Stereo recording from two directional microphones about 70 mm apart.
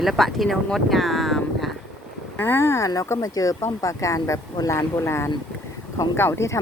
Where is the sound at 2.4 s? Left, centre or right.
Left.